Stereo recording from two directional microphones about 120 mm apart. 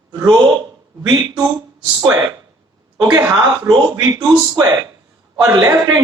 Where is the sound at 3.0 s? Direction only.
25° right (ahead or behind).